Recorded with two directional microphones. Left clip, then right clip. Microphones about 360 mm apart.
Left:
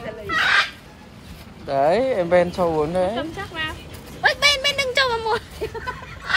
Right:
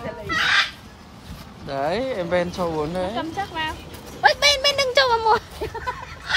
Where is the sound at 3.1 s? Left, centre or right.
Right.